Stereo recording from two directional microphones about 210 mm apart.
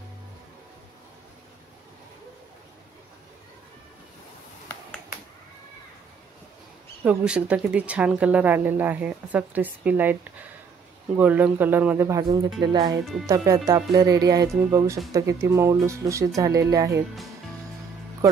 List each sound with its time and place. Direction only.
7.1 s speech: 5° right (ahead or behind)
11.1 s speech: 10° right (ahead or behind)